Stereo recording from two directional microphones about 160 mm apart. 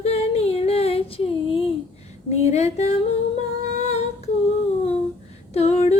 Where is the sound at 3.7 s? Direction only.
45° left (ahead or behind).